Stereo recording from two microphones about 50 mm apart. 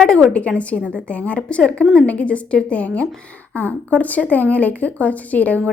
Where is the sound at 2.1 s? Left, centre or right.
Left.